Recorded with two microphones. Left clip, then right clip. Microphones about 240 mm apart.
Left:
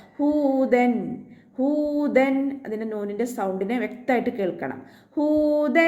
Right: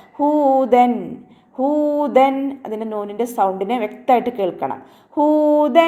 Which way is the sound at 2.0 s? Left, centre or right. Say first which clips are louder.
Right 6 dB; right.